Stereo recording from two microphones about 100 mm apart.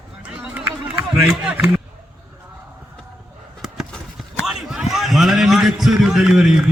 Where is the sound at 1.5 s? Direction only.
15° right (ahead or behind).